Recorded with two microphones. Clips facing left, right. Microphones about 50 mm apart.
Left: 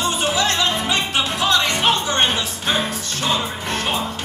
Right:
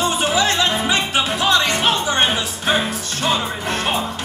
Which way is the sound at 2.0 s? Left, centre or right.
Centre.